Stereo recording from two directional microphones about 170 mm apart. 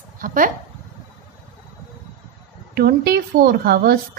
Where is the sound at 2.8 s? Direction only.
70° right (ahead or behind).